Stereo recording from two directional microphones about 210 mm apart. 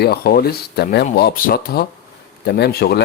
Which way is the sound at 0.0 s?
45° left (ahead or behind).